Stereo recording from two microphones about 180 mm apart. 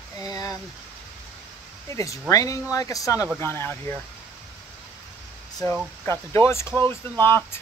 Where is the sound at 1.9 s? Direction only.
15° left (ahead or behind).